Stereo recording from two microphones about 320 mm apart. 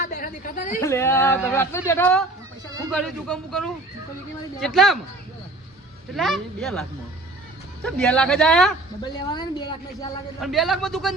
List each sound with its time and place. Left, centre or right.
0.0 s chatter: left
0.8 s speech: centre
6.1 s speech: centre
7.9 s speech: centre
9.3 s speech: centre
10.4 s speech: centre